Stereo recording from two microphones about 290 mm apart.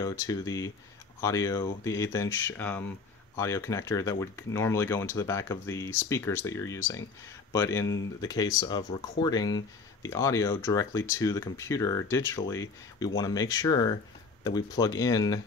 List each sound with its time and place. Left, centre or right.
0.0 s speech: centre